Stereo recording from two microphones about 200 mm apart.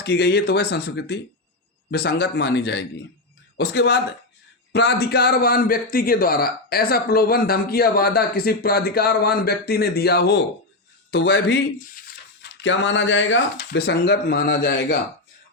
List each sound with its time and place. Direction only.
0.0 s a man's voice: 55° left (ahead or behind)